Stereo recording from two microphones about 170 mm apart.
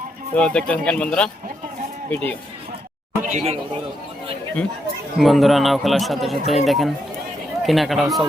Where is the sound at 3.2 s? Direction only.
40° right (ahead or behind).